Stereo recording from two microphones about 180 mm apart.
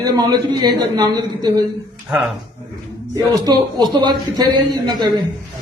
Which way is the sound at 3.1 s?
20° right (ahead or behind).